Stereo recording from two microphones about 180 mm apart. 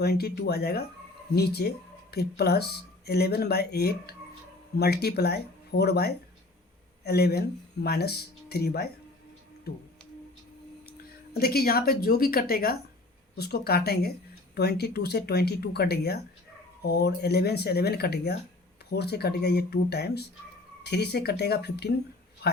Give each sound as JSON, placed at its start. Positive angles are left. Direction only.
{"t": 0.0, "sound": "speech", "side_deg": 65}
{"t": 11.3, "sound": "speech", "side_deg": 60}